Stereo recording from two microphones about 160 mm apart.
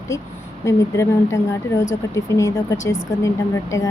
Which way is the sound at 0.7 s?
15° left (ahead or behind).